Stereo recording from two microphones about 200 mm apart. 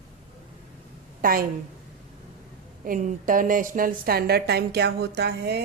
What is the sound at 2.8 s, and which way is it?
A woman's voice, 45° right (ahead or behind).